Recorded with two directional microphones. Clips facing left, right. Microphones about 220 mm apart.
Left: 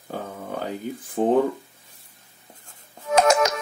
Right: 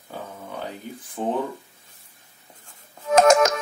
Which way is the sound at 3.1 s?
45° right (ahead or behind).